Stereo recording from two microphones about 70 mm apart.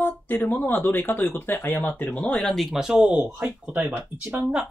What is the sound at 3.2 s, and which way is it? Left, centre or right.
Speech, right.